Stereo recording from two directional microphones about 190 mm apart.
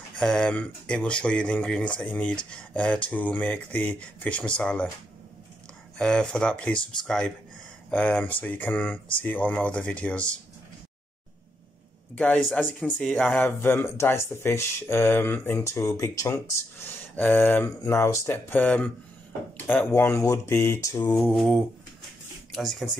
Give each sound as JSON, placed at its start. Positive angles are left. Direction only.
{"t": 0.1, "sound": "speech", "side_deg": 5}
{"t": 5.9, "sound": "speech", "side_deg": 5}
{"t": 7.9, "sound": "speech", "side_deg": 10}
{"t": 12.2, "sound": "speech", "side_deg": 5}